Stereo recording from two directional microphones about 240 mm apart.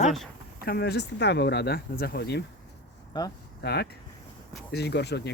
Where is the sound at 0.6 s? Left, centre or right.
Left.